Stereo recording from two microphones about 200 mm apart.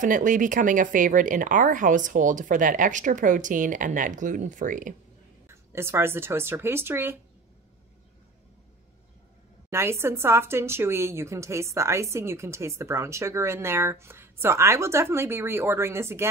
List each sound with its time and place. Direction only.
0.0 s speech: 40° right (ahead or behind)
5.5 s speech: 15° right (ahead or behind)
9.7 s speech: 10° right (ahead or behind)